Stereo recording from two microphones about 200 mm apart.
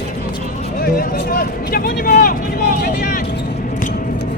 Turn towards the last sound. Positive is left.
turn(degrees=45)  # may be behind; listen again after turning